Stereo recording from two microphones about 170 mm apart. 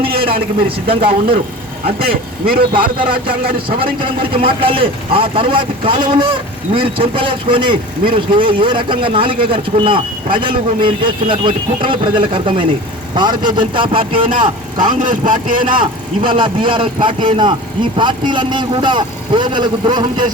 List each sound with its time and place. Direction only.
0.0 s a sound: 30° right (ahead or behind)
0.9 s speech: 30° right (ahead or behind)
2.5 s a man's voice: 30° right (ahead or behind)
15.0 s speech: 50° right (ahead or behind)
15.6 s a man's voice: 30° right (ahead or behind)